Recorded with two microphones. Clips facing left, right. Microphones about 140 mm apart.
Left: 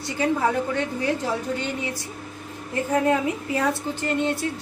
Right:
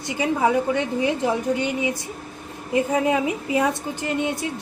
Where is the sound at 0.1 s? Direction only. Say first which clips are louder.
Right 2 dB; 15° right (ahead or behind).